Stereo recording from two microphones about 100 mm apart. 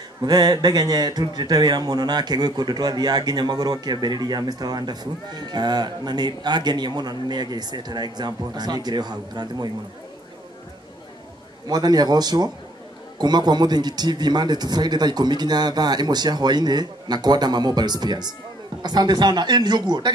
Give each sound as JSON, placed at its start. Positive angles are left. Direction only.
{"t": 0.2, "sound": "speech", "side_deg": -45}
{"t": 11.6, "sound": "speech", "side_deg": -40}